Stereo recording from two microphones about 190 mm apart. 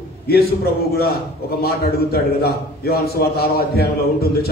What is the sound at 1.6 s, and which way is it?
A man's voice, 55° left (ahead or behind).